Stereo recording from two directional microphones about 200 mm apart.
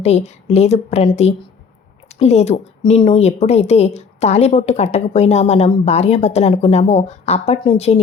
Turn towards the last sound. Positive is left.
turn(degrees=30)  # may be behind; listen again after turning